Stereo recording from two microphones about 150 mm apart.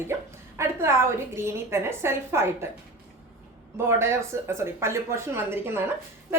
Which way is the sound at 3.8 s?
15° right (ahead or behind).